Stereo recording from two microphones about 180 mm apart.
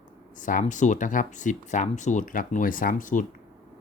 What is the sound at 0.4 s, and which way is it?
Speech, 45° left (ahead or behind).